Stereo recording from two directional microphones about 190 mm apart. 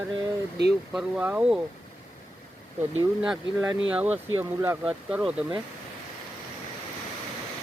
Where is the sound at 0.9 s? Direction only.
5° right (ahead or behind).